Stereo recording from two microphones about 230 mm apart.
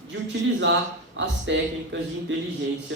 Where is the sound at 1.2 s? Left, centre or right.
Right.